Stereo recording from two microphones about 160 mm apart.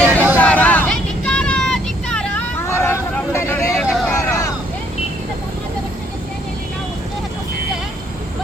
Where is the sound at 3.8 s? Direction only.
5° left (ahead or behind).